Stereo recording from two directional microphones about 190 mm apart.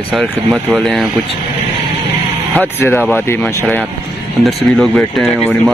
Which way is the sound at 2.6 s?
10° left (ahead or behind).